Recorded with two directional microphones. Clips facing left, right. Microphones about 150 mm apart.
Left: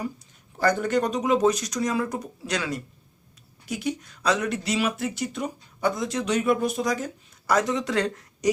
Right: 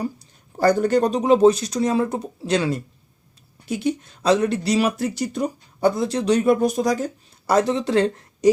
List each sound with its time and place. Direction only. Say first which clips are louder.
0.5 s speech: right 5 dB; 35° right (ahead or behind)